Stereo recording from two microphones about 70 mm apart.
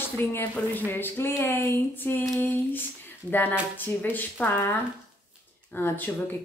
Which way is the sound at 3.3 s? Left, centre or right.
Left.